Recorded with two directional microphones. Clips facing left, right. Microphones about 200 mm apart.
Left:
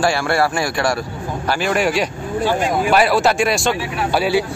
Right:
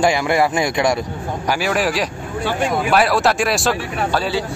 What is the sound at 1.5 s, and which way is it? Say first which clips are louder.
Speech: left 1 dB; 5° right (ahead or behind).